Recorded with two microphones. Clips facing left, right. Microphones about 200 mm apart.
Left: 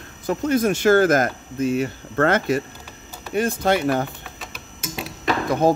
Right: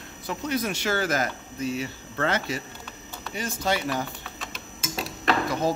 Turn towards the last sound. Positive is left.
turn(degrees=55)  # may be behind; listen again after turning